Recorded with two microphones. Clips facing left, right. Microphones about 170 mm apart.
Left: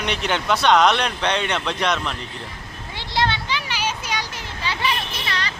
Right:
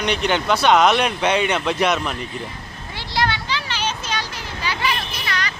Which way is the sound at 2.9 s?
25° left (ahead or behind).